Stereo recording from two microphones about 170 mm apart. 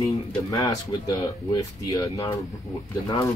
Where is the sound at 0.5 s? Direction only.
20° left (ahead or behind).